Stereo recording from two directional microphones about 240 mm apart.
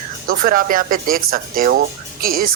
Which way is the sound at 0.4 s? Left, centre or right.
Right.